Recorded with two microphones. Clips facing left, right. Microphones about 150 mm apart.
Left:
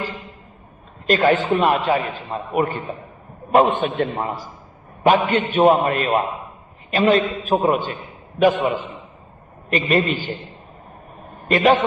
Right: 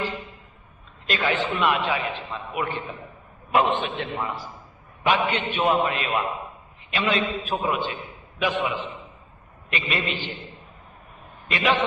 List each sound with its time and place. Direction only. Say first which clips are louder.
1.0 s a man's voice: left 8 dB; 45° left (ahead or behind)